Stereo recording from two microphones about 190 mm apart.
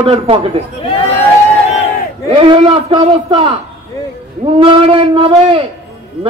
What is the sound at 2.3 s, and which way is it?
A man's voice, 30° right (ahead or behind).